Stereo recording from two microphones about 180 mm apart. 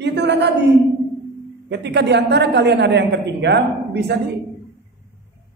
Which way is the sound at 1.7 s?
70° right (ahead or behind).